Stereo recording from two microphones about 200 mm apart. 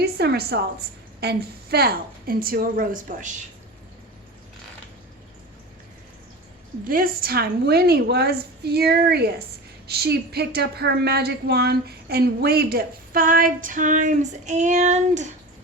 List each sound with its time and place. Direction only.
0.0 s a woman's voice: 55° right (ahead or behind)
6.8 s speech: 45° right (ahead or behind)